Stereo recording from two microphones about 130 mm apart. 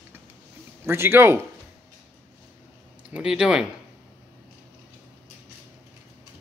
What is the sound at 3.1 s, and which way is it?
Speech, 5° right (ahead or behind).